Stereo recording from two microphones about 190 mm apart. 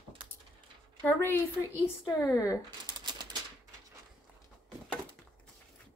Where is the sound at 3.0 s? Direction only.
20° right (ahead or behind).